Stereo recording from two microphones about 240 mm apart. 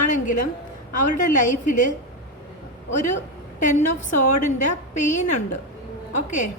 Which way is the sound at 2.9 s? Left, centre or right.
Left.